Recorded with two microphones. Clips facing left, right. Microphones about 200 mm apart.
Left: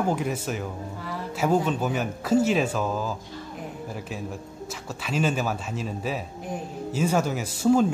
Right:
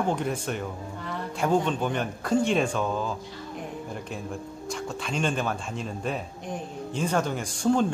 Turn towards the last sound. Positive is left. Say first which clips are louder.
# left 3 dB
turn(degrees=5)  # may be behind; listen again after turning